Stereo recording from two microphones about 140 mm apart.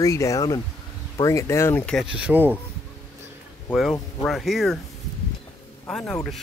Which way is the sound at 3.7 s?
Centre (ahead or behind).